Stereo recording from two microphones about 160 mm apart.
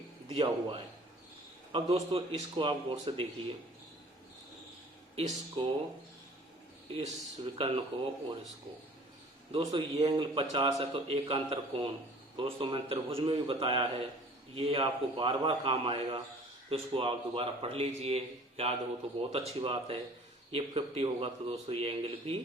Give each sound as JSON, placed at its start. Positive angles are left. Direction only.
{"t": 0.3, "sound": "a man's voice", "side_deg": -30}
{"t": 5.1, "sound": "a man's voice", "side_deg": -35}
{"t": 6.9, "sound": "a man's voice", "side_deg": -35}
{"t": 9.5, "sound": "a man's voice", "side_deg": -35}